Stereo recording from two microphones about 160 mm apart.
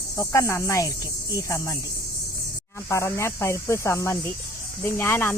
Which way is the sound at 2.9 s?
20° left (ahead or behind).